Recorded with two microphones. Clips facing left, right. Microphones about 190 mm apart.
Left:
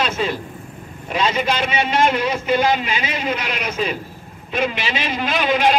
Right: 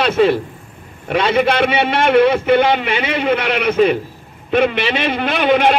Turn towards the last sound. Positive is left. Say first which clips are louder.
# right 4 dB
turn(degrees=-60)  # may be behind; listen again after turning